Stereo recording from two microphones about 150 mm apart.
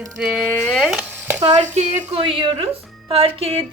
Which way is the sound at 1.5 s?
50° right (ahead or behind).